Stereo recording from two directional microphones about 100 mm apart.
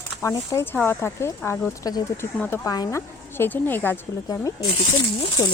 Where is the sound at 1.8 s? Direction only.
40° left (ahead or behind); by 4.0 s 20° left (ahead or behind).